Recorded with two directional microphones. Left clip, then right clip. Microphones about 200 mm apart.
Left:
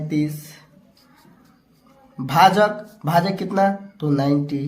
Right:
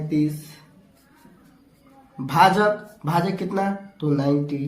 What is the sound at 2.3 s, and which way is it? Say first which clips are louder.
Speech: left 2 dB; 35° left (ahead or behind).